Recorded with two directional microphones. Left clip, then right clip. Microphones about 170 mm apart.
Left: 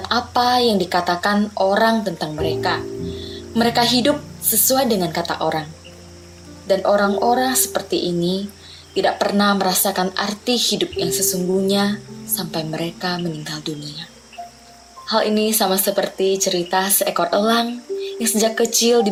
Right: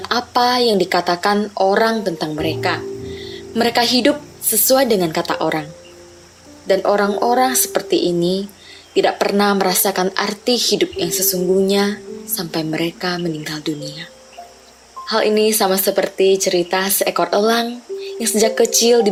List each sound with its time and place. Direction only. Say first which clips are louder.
0.0 s speech: right 2 dB; 40° right (ahead or behind)
6.7 s speech: right 1 dB; 40° right (ahead or behind)
15.0 s speech: right 3 dB; 45° right (ahead or behind)